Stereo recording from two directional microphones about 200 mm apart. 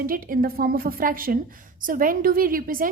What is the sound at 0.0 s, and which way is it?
A woman's voice, 45° right (ahead or behind).